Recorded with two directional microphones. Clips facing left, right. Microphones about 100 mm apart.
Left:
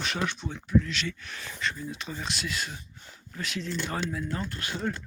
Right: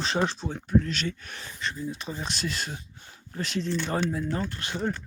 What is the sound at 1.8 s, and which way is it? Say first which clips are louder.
Speech: right 3 dB; 25° right (ahead or behind).